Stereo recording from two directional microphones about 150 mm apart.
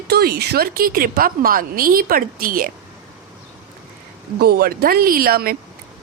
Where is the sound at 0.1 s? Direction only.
90° right; by 2.7 s 70° right (ahead or behind).